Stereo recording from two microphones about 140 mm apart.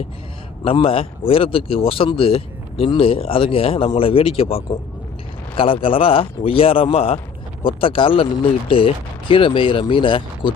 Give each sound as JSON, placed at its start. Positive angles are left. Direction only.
{"t": 0.6, "sound": "speech", "side_deg": 40}